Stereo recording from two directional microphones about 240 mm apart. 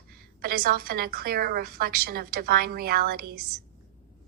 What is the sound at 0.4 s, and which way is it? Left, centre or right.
A woman's voice, right.